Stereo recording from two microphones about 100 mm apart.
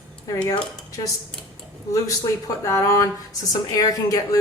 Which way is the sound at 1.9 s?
35° left (ahead or behind).